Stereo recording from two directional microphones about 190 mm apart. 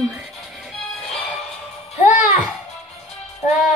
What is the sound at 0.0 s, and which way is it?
Music, 5° right (ahead or behind).